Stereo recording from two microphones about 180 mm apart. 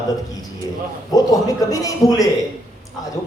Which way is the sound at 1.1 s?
20° left (ahead or behind).